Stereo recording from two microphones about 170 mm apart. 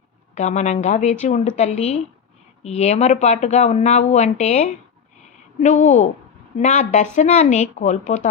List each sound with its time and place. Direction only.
0.3 s speech: 45° left (ahead or behind)